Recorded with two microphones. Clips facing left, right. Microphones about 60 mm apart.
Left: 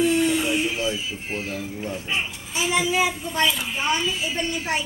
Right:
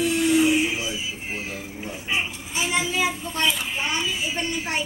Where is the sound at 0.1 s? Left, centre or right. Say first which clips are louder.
Right 2 dB; centre.